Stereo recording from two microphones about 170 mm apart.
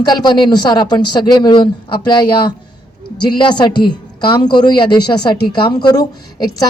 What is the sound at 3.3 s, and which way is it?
A woman's voice, 25° left (ahead or behind).